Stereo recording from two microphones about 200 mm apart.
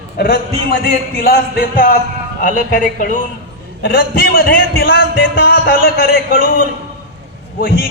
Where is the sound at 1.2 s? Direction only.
50° left (ahead or behind).